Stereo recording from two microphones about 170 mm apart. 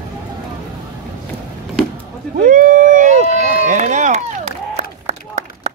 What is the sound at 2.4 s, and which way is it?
Run, 50° right (ahead or behind).